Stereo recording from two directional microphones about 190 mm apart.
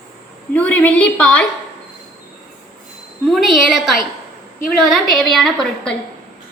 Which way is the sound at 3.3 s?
Centre (ahead or behind).